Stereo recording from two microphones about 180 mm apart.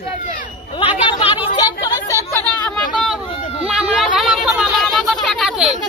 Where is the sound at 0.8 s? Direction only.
30° left (ahead or behind).